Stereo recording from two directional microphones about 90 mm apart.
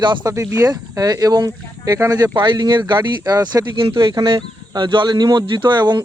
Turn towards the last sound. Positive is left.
turn(degrees=-55)  # may be behind; listen again after turning